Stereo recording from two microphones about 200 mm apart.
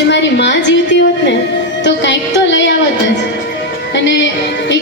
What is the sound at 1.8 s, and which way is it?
Speech, 65° left (ahead or behind).